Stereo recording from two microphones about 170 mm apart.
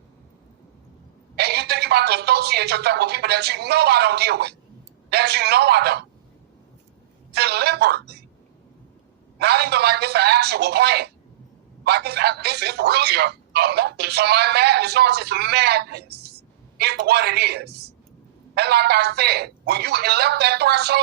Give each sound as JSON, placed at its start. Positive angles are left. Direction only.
{"t": 1.4, "sound": "speech", "side_deg": -70}
{"t": 7.3, "sound": "speech", "side_deg": -70}
{"t": 9.4, "sound": "speech", "side_deg": -70}